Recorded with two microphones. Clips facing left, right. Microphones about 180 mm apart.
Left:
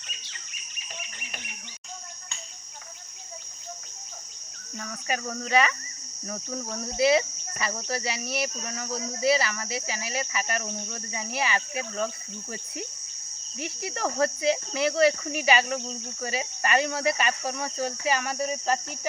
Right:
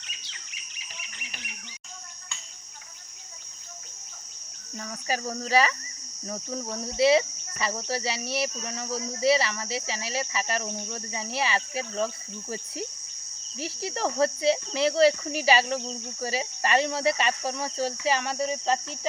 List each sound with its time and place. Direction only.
4.8 s speech: 30° right (ahead or behind)
7.0 s speech: 25° right (ahead or behind)
13.6 s speech: 30° right (ahead or behind)